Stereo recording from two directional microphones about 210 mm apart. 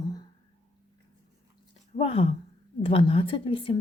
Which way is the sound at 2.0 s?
30° left (ahead or behind).